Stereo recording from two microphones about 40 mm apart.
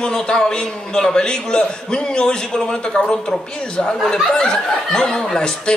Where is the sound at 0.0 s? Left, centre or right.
Centre.